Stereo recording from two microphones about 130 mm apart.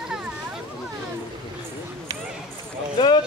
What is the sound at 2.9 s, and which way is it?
Clip-clop, 35° left (ahead or behind).